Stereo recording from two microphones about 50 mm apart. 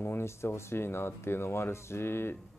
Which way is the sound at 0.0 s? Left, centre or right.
Left.